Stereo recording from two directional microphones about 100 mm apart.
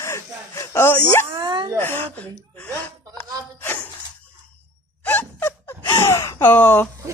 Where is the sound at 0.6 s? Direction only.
25° left (ahead or behind).